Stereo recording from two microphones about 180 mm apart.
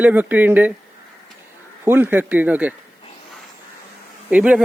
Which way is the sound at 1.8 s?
10° right (ahead or behind).